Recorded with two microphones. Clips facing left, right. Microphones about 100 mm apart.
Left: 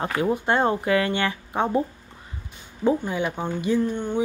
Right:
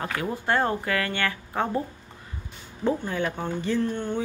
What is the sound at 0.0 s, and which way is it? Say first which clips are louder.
Speech: left 5 dB; 20° left (ahead or behind).